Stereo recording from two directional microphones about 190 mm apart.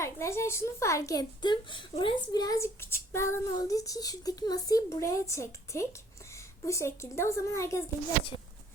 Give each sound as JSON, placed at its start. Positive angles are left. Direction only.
{"t": 0.0, "sound": "a woman's voice", "side_deg": 15}